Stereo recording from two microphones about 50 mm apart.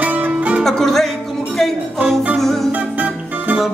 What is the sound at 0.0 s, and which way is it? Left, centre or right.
Music, right.